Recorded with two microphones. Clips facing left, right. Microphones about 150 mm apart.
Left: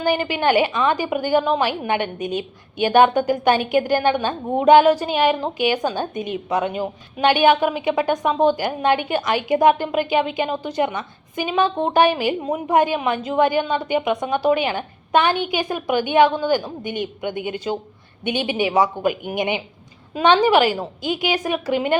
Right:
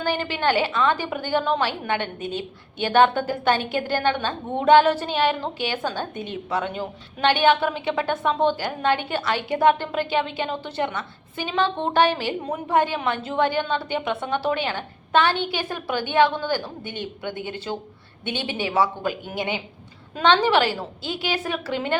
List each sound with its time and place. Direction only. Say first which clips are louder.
0.0 s a woman's voice: left 4 dB; 15° left (ahead or behind)